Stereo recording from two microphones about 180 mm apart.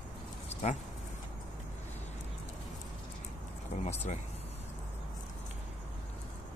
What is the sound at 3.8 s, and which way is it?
Speech, 35° left (ahead or behind).